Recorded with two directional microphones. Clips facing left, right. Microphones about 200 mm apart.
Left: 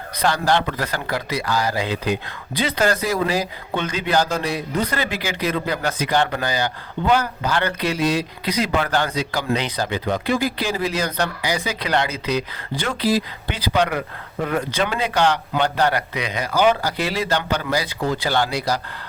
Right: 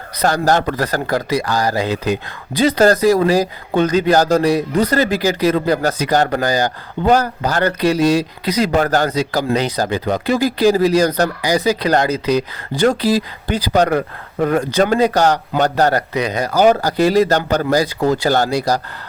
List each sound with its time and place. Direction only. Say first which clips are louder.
0.2 s a man's voice: right 4 dB; 40° right (ahead or behind)